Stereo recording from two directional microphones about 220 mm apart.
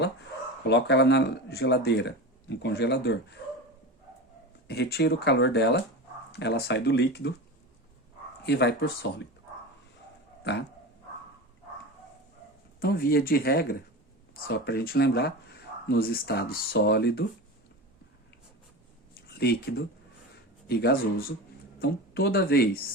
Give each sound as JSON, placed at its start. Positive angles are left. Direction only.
{"t": 0.7, "sound": "speech", "side_deg": 50}
{"t": 4.7, "sound": "speech", "side_deg": 45}
{"t": 8.4, "sound": "speech", "side_deg": 50}
{"t": 12.8, "sound": "speech", "side_deg": 45}
{"t": 19.1, "sound": "a sound", "side_deg": 45}
{"t": 20.7, "sound": "a woman's voice", "side_deg": 45}